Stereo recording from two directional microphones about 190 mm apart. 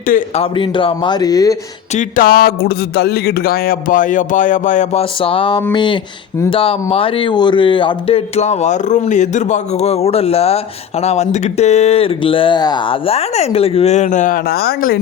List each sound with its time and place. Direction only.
0.3 s a man's voice: 25° left (ahead or behind)
2.0 s a man's voice: 50° left (ahead or behind)